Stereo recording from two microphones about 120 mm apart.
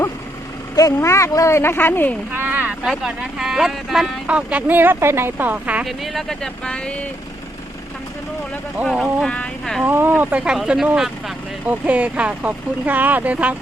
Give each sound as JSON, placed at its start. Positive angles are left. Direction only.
{"t": 0.8, "sound": "speech", "side_deg": 25}
{"t": 2.3, "sound": "a sound", "side_deg": -15}
{"t": 3.0, "sound": "speech", "side_deg": -5}
{"t": 5.8, "sound": "speech", "side_deg": 0}
{"t": 8.8, "sound": "speech", "side_deg": 0}
{"t": 9.8, "sound": "speech", "side_deg": -15}